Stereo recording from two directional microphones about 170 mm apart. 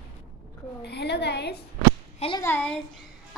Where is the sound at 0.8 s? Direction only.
80° left.